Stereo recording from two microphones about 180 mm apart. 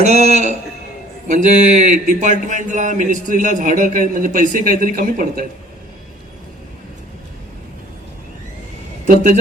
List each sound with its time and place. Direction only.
0.0 s a man's voice: 40° right (ahead or behind)
9.0 s speech: 45° right (ahead or behind)